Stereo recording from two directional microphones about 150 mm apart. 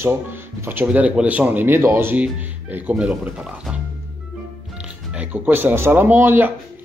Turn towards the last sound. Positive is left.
turn(degrees=-15)  # may be behind; listen again after turning